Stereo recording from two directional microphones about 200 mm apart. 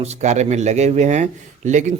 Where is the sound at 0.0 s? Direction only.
35° right (ahead or behind).